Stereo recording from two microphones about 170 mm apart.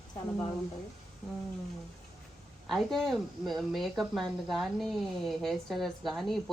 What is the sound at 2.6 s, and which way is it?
Speech, centre (ahead or behind).